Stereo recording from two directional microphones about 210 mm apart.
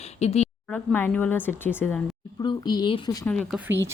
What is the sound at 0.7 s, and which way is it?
Speech, 10° left (ahead or behind).